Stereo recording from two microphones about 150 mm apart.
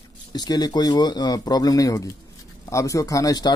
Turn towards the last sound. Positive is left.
turn(degrees=25)  # may be behind; listen again after turning